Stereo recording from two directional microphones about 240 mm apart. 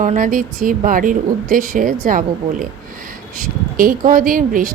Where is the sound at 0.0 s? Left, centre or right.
Right.